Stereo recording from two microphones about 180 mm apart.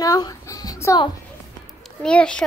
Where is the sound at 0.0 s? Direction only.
20° left (ahead or behind).